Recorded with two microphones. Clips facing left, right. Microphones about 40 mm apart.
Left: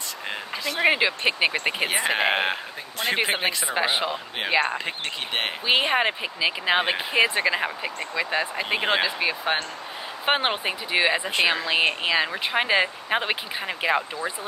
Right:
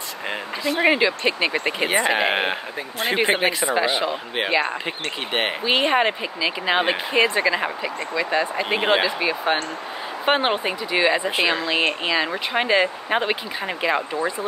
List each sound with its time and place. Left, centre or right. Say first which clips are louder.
0.3 s speech: right 5 dB; centre
0.8 s speech: right 1 dB; centre
3.7 s speech: right 3 dB; centre
4.5 s speech: even; centre
4.8 s speech: right 2 dB; centre
5.7 s speech: right 2 dB; centre
7.2 s speech: right 3 dB; centre
8.3 s speech: right 4 dB; centre